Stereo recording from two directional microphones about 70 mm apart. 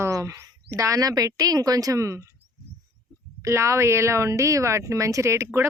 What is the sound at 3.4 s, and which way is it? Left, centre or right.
Speech, right.